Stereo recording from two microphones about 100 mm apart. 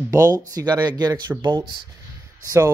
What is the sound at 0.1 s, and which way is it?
Speech, 35° right (ahead or behind).